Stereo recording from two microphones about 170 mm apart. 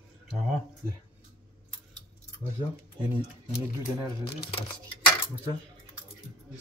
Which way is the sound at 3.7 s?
20° right (ahead or behind).